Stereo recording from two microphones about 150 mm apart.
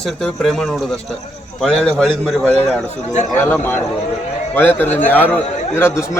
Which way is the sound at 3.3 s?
10° left (ahead or behind).